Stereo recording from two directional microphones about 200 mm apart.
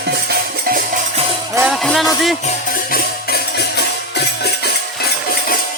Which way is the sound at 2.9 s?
50° left (ahead or behind).